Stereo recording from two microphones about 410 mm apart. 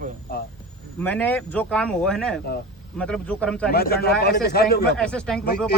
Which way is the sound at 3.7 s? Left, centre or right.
Left.